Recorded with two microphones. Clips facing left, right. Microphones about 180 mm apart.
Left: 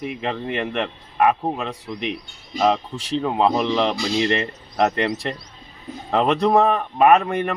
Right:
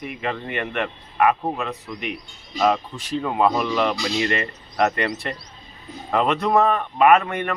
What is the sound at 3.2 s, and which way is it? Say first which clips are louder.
A man's voice: left 1 dB; 25° left (ahead or behind).